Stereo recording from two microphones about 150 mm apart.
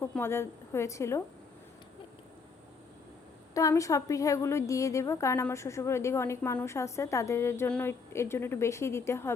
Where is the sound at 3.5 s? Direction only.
20° left (ahead or behind).